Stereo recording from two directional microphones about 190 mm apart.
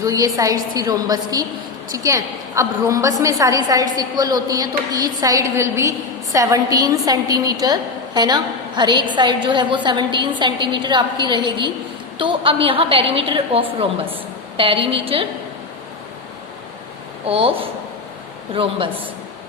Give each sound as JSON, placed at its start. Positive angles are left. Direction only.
{"t": 0.0, "sound": "a woman's voice", "side_deg": -20}
{"t": 17.2, "sound": "a woman's voice", "side_deg": -30}
{"t": 18.5, "sound": "a woman's voice", "side_deg": -30}